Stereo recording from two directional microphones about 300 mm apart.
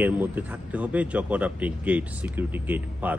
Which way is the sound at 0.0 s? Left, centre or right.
Centre.